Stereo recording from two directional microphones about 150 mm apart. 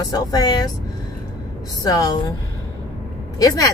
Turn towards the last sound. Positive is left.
turn(degrees=25)  # may be behind; listen again after turning